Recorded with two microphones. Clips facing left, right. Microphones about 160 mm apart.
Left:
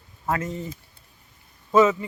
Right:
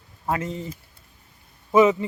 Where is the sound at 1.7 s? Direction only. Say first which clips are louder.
Right 1 dB; 15° right (ahead or behind).